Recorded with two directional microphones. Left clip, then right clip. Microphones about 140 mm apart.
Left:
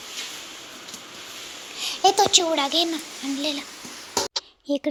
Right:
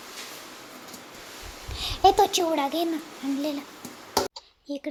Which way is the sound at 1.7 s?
25° right (ahead or behind).